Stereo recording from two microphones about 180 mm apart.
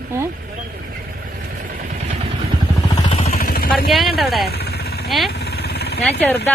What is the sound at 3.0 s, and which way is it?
Vehicle, 30° left (ahead or behind).